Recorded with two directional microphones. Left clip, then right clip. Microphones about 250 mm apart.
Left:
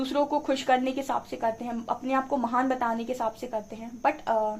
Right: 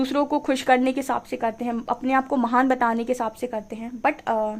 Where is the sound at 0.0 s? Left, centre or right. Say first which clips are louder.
Right 3 dB; right.